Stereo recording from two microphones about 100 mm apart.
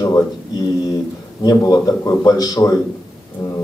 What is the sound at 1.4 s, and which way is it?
A man's voice, 40° left (ahead or behind).